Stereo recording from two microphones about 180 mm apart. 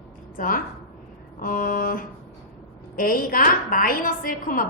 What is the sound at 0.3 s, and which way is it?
A woman's voice, 50° left (ahead or behind).